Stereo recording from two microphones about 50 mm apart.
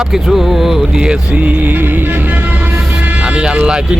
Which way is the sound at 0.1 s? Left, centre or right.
Centre.